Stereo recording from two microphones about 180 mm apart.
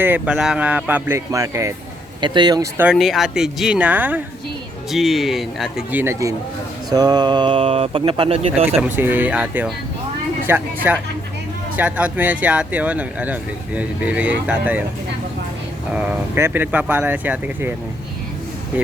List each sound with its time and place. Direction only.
0.0 s speech: 10° right (ahead or behind); by 2.6 s 25° right (ahead or behind)
2.7 s speech: 5° right (ahead or behind); by 8.8 s 35° right (ahead or behind)
8.8 s speech: 10° right (ahead or behind)
15.9 s speech: 10° right (ahead or behind)